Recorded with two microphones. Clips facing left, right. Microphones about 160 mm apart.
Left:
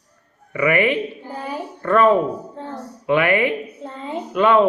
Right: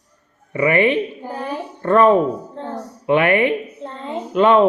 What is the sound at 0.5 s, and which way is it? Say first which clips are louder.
Speech: right 2 dB; 25° right (ahead or behind).